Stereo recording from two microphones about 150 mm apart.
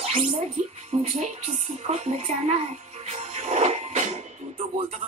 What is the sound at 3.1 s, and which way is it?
Music, 45° right (ahead or behind).